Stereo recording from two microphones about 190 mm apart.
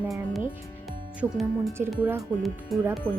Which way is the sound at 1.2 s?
Centre (ahead or behind).